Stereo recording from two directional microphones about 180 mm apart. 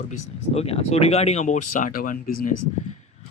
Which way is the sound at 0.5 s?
35° left (ahead or behind).